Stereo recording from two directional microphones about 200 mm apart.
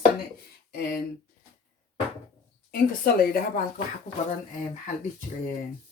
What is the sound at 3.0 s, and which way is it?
Speech, 45° left (ahead or behind).